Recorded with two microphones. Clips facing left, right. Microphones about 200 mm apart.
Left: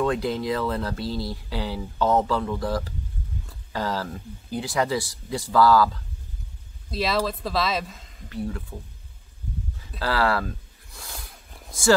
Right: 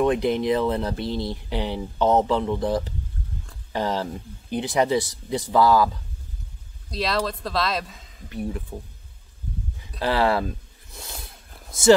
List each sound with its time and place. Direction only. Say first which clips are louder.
0.0 s speech: right 4 dB; 20° right (ahead or behind)
6.9 s speech: left 1 dB; centre (ahead or behind)
8.3 s speech: right 1 dB; 15° right (ahead or behind)
9.9 s speech: right 2 dB; 20° right (ahead or behind)
11.5 s a sound: left 2 dB; centre (ahead or behind)